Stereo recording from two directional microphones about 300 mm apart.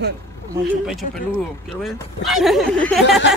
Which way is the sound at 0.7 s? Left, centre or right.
Centre.